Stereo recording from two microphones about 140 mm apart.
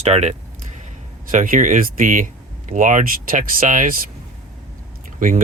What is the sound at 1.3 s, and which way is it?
Speech, 70° right (ahead or behind).